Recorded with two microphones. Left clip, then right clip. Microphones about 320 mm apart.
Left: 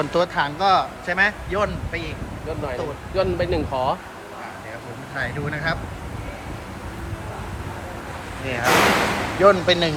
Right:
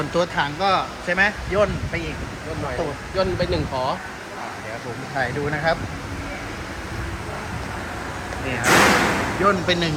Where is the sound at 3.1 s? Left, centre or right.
Left.